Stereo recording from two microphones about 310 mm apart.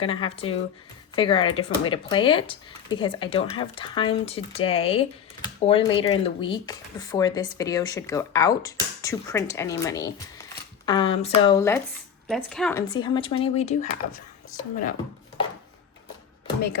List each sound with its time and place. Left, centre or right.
0.0 s speech: centre
12.9 s speech: centre